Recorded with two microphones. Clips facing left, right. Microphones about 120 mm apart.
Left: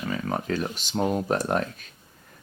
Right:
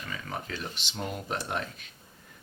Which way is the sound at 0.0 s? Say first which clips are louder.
Left 9 dB; 45° left (ahead or behind).